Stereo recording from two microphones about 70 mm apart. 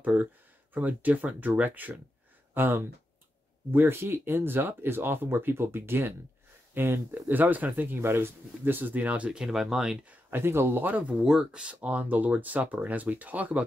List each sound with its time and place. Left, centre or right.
0.0 s speech: right
9.4 s speech: centre
10.3 s speech: right
11.2 s speech: centre